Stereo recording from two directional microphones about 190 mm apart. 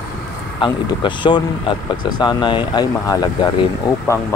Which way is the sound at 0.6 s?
25° left (ahead or behind).